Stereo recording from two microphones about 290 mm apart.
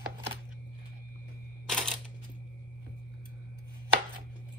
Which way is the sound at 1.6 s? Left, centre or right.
Centre.